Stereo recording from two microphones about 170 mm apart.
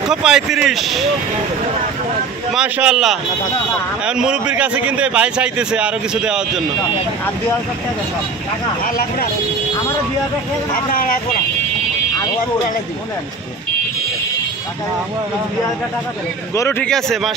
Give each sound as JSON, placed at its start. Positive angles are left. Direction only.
{"t": 0.1, "sound": "speech", "side_deg": -5}
{"t": 2.5, "sound": "a man's voice", "side_deg": -5}
{"t": 8.8, "sound": "speech", "side_deg": 60}
{"t": 16.5, "sound": "speech", "side_deg": 15}